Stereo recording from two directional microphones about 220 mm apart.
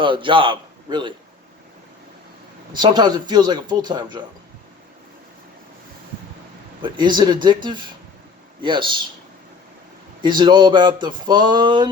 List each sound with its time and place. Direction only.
0.0 s a man's voice: 20° right (ahead or behind)
2.7 s speech: 20° right (ahead or behind)
6.8 s speech: 20° right (ahead or behind)
10.2 s speech: 20° right (ahead or behind)